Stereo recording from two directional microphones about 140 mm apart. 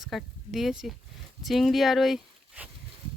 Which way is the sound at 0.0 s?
Centre (ahead or behind).